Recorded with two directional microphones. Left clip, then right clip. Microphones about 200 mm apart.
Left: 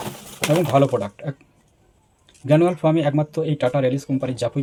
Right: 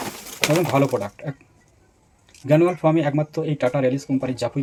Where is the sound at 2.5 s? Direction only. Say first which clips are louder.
Even; 10° left (ahead or behind).